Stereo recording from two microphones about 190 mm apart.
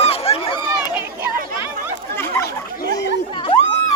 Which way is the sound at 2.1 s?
10° left (ahead or behind).